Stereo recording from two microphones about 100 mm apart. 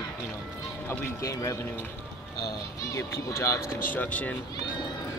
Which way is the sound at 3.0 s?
30° left (ahead or behind).